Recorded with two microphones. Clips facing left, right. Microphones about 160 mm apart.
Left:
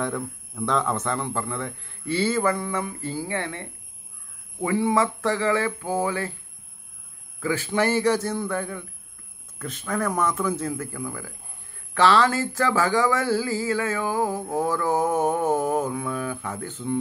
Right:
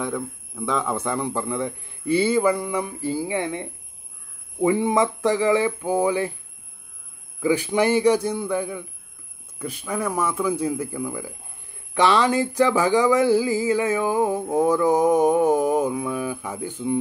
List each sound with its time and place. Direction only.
0.0 s a man's voice: 5° right (ahead or behind)
7.3 s a man's voice: 15° right (ahead or behind)